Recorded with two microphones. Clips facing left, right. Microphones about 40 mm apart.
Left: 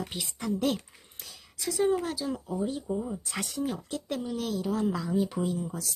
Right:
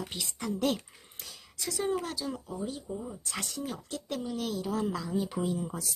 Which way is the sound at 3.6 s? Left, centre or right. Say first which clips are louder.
Left 5 dB; centre.